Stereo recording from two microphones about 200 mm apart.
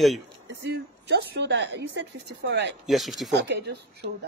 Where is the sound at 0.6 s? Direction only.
55° right (ahead or behind).